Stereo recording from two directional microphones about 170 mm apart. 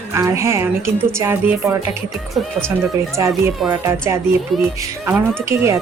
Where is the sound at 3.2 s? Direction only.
20° right (ahead or behind).